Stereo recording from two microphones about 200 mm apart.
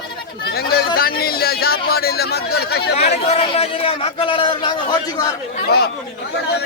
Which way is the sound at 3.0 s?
30° left (ahead or behind).